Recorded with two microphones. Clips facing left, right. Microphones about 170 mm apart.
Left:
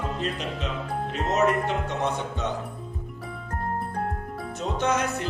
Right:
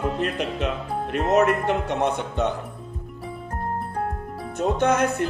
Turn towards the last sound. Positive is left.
turn(degrees=-55)  # may be behind; listen again after turning